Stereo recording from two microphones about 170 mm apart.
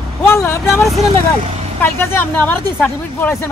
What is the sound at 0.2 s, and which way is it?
Vehicle, 15° left (ahead or behind).